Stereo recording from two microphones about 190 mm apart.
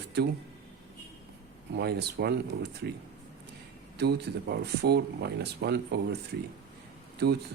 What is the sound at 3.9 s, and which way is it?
Speech, 60° right (ahead or behind).